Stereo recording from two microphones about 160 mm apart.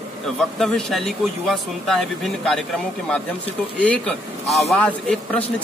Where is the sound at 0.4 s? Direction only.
5° left (ahead or behind).